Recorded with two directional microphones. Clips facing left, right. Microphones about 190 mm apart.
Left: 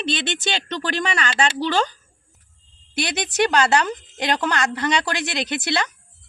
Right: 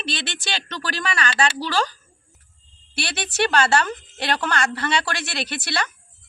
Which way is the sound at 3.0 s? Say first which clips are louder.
Left 3 dB; 15° left (ahead or behind).